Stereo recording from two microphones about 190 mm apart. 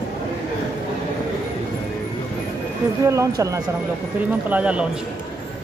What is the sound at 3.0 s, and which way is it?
Speech, 15° right (ahead or behind).